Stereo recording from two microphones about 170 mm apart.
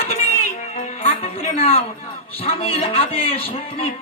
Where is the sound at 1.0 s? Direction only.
35° left (ahead or behind).